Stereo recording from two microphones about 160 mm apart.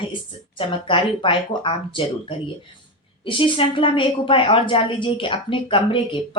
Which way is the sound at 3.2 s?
35° left (ahead or behind).